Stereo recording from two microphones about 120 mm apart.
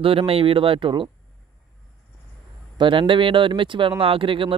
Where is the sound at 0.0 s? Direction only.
50° right (ahead or behind).